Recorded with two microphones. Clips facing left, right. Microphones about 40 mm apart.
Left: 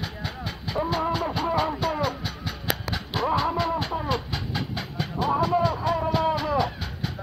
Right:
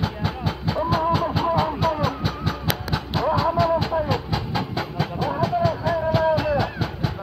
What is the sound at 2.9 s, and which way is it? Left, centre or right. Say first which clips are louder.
Music: right 5 dB; centre.